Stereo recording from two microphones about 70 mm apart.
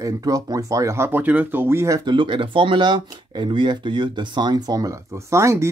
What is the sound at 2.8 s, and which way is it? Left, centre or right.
Speech, right.